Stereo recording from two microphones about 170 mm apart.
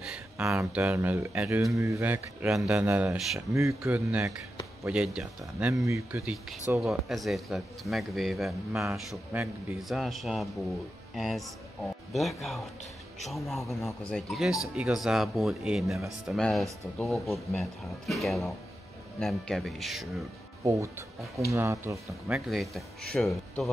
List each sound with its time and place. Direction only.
0.4 s speech: 5° right (ahead or behind)
5.7 s speech: 15° right (ahead or behind)
6.8 s speech: centre (ahead or behind)
20.6 s speech: 15° right (ahead or behind)
22.3 s speech: centre (ahead or behind)